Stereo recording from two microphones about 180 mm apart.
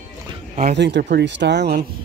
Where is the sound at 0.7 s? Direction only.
75° right (ahead or behind).